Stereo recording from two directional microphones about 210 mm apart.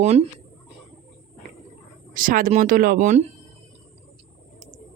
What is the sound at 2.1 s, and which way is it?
Speech, 40° right (ahead or behind).